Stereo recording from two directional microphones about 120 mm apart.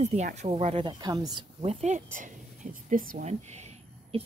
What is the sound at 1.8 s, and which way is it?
Speech, 80° right.